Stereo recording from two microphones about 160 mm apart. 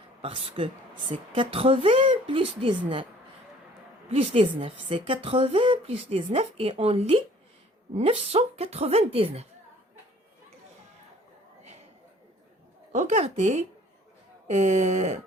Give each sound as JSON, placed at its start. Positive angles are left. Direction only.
{"t": 0.2, "sound": "a woman's voice", "side_deg": -35}
{"t": 4.1, "sound": "a woman's voice", "side_deg": -35}
{"t": 12.9, "sound": "speech", "side_deg": -45}